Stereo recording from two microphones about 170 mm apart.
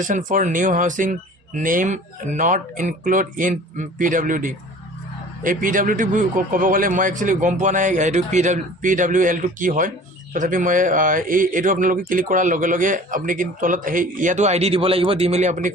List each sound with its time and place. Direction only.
0.0 s a man's voice: 50° right (ahead or behind)